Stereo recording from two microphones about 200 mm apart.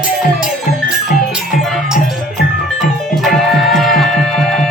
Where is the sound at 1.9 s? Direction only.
45° left (ahead or behind).